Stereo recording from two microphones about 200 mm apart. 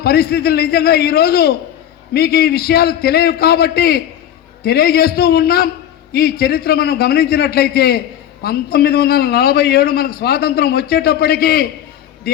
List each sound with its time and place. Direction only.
0.0 s a man's voice: 50° left (ahead or behind)